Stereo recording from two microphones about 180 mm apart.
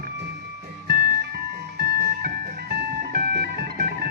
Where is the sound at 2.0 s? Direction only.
55° right (ahead or behind).